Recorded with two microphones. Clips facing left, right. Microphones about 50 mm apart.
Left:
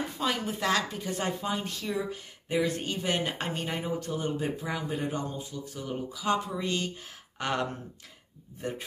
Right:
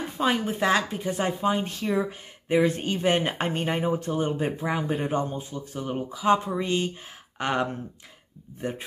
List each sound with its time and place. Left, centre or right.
0.2 s a woman's voice: right